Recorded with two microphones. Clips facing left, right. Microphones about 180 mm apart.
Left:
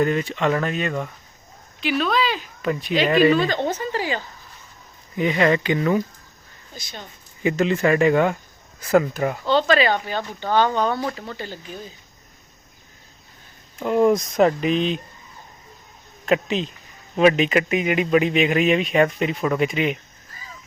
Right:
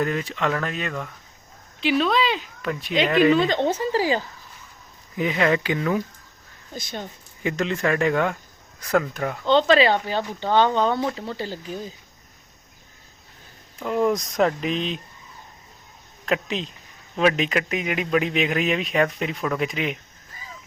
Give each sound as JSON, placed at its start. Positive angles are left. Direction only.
{"t": 0.0, "sound": "a man's voice", "side_deg": 0}
{"t": 1.8, "sound": "speech", "side_deg": -25}
{"t": 2.6, "sound": "a man's voice", "side_deg": 0}
{"t": 3.3, "sound": "speech", "side_deg": -20}
{"t": 5.1, "sound": "a man's voice", "side_deg": 0}
{"t": 7.4, "sound": "a man's voice", "side_deg": 5}
{"t": 9.5, "sound": "speech", "side_deg": -25}
{"t": 11.3, "sound": "speech", "side_deg": -30}
{"t": 13.8, "sound": "a man's voice", "side_deg": 5}
{"t": 16.2, "sound": "a man's voice", "side_deg": 0}